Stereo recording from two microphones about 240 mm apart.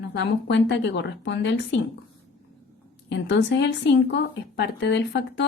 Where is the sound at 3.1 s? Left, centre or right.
Left.